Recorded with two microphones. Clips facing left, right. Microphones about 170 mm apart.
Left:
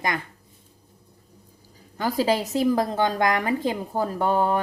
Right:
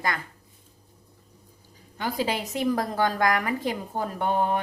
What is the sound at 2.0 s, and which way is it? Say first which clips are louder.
A woman's voice: left 5 dB; 35° left (ahead or behind).